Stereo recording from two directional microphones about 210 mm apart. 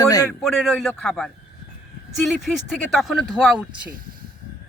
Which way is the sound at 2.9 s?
Centre (ahead or behind).